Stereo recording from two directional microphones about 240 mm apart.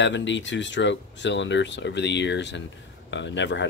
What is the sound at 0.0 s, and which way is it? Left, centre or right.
Speech, left.